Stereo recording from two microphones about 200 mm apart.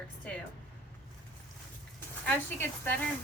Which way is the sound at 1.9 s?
10° left (ahead or behind).